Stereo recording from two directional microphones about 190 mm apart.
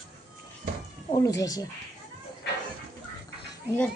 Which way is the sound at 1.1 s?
15° left (ahead or behind).